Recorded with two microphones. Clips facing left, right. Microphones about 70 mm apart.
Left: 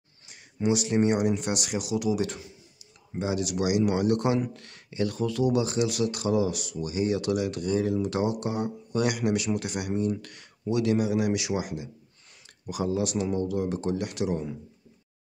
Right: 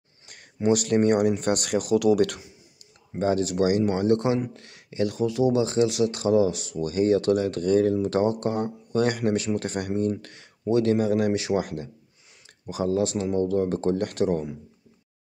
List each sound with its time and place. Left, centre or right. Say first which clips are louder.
0.7 s speech: right 3 dB; right
3.2 s speech: right 5 dB; right
10.1 s speech: right 1 dB; right
12.6 s speech: right 4 dB; right